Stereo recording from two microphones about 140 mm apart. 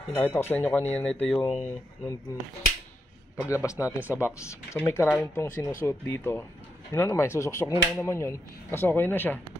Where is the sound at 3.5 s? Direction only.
20° left (ahead or behind).